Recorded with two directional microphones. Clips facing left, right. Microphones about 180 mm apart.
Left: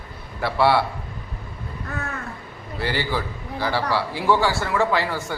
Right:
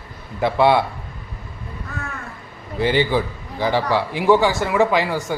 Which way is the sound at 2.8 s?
20° right (ahead or behind).